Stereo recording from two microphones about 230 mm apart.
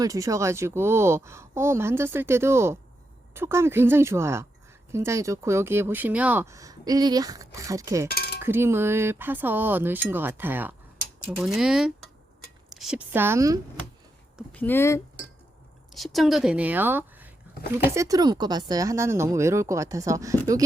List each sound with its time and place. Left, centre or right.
0.0 s speech: centre
8.1 s chink: left
8.4 s speech: centre
14.3 s speech: centre
15.9 s speech: centre